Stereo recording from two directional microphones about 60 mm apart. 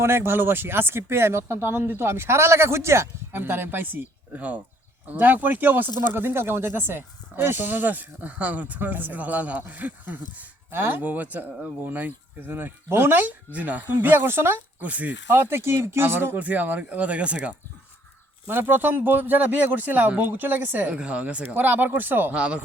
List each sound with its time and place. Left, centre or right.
0.0 s speech: right
3.3 s speech: right
14.8 s speech: right
15.3 s speech: right
16.4 s speech: right
18.4 s speech: right
22.4 s speech: centre